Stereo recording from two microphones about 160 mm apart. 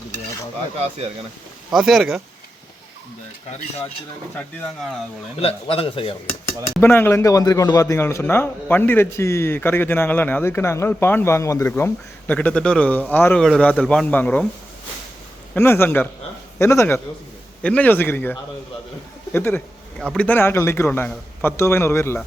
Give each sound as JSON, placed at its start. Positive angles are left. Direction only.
{"t": 1.7, "sound": "speech", "side_deg": 0}
{"t": 4.4, "sound": "a man's voice", "side_deg": 10}
{"t": 5.4, "sound": "a man's voice", "side_deg": 35}
{"t": 6.8, "sound": "a man's voice", "side_deg": 15}
{"t": 15.5, "sound": "a man's voice", "side_deg": 15}
{"t": 19.3, "sound": "a sound", "side_deg": 10}
{"t": 20.1, "sound": "a man's voice", "side_deg": 10}